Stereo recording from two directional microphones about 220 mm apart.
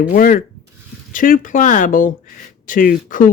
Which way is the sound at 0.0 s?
40° left (ahead or behind).